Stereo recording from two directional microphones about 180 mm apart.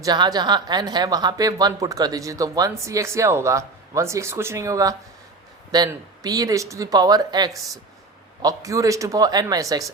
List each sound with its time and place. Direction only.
0.0 s a woman's voice: 20° right (ahead or behind)